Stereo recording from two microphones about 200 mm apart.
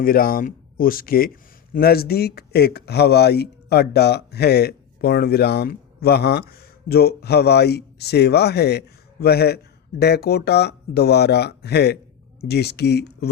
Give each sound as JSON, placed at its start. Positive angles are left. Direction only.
{"t": 0.0, "sound": "speech", "side_deg": 45}